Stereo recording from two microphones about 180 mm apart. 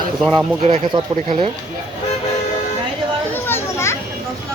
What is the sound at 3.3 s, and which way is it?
Children playing, 10° left (ahead or behind).